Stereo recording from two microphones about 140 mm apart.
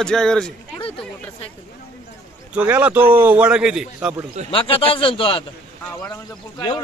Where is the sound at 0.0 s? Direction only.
5° left (ahead or behind).